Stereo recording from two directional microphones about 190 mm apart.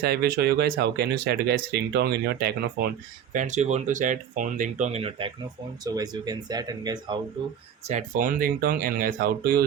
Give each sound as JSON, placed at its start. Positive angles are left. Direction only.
{"t": 0.0, "sound": "speech", "side_deg": -55}
{"t": 3.3, "sound": "speech", "side_deg": -40}
{"t": 7.9, "sound": "speech", "side_deg": -40}